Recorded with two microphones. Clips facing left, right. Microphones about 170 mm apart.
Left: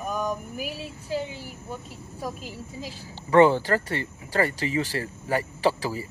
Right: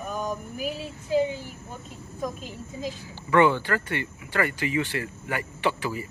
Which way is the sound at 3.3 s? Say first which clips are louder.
Left 3 dB; 35° left (ahead or behind).